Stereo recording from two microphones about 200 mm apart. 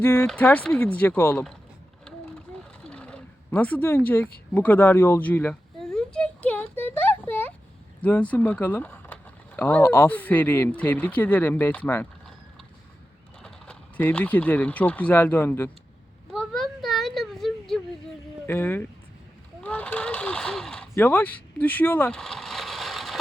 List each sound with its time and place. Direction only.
0.0 s speech: 10° left (ahead or behind)
2.8 s wild animals: 5° left (ahead or behind)
8.0 s speech: 5° left (ahead or behind)
13.4 s speech: 5° left (ahead or behind)
16.3 s a sound: centre (ahead or behind)
18.4 s speech: 10° left (ahead or behind)
19.6 s a sound: 5° left (ahead or behind)